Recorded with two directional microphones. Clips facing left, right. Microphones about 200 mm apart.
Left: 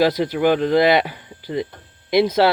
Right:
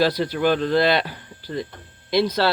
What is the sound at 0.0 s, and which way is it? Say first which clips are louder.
Speech: left 3 dB; 20° left (ahead or behind).